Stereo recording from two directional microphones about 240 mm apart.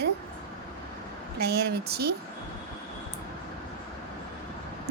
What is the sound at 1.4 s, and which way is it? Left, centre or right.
Speech, right.